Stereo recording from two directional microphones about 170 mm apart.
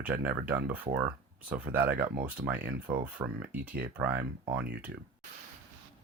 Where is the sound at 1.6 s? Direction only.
10° right (ahead or behind).